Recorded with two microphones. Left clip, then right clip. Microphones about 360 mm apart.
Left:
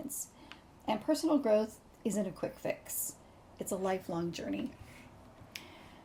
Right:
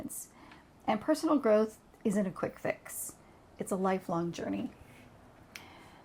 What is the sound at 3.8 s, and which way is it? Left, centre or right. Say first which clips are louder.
Speech: right 3 dB; right.